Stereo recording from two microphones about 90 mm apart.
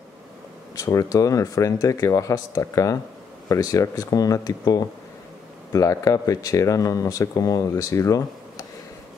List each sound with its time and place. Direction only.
0.7 s speech: 40° left (ahead or behind)